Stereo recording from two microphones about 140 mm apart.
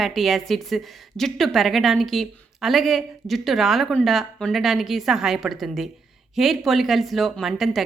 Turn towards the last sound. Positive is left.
turn(degrees=0)  # may be behind; listen again after turning